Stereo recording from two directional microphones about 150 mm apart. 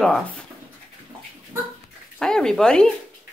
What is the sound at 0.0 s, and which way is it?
Speech, 5° left (ahead or behind).